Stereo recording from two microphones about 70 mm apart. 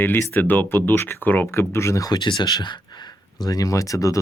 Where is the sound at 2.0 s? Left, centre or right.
Left.